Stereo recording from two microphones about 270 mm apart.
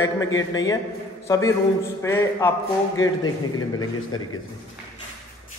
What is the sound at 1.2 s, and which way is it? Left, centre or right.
A man's voice, centre.